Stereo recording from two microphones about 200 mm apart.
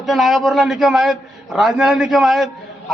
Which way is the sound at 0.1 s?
Centre (ahead or behind).